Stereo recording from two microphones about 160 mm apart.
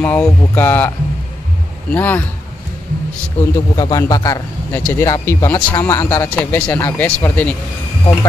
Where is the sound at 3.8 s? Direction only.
25° left (ahead or behind).